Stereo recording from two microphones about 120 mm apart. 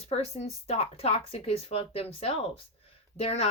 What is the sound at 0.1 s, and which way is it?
A woman's voice, 60° left (ahead or behind).